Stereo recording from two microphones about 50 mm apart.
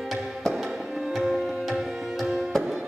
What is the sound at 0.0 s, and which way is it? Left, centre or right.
Music, centre.